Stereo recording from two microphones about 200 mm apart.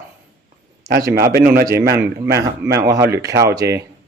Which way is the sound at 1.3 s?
50° right (ahead or behind).